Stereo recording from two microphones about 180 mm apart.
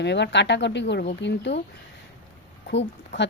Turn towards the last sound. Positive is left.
turn(degrees=75)  # may be behind; listen again after turning